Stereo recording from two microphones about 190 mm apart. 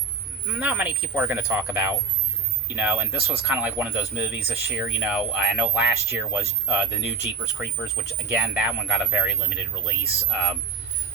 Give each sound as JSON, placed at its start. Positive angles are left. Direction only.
{"t": 0.5, "sound": "speech", "side_deg": -5}
{"t": 8.3, "sound": "speech", "side_deg": -5}